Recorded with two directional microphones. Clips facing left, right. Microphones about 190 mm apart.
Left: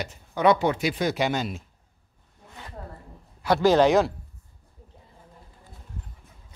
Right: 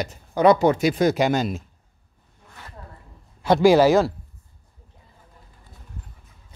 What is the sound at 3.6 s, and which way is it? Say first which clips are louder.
Speech: right 3 dB; 5° right (ahead or behind).